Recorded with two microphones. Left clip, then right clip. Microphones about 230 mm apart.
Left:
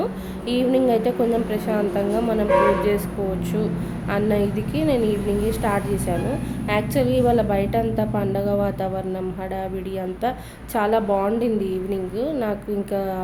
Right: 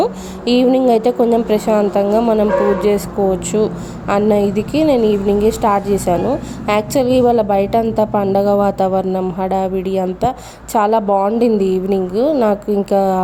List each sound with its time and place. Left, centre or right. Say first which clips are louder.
0.0 s a woman's voice: right 9 dB; right
4.1 s a woman's voice: right 8 dB; right